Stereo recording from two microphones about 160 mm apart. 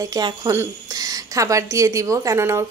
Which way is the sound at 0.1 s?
20° right (ahead or behind).